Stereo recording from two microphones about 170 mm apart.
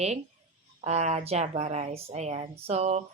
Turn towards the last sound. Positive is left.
turn(degrees=-40)  # may be behind; listen again after turning